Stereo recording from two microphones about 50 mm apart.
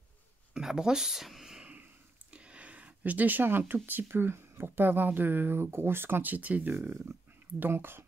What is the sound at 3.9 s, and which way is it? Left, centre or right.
Speech, right.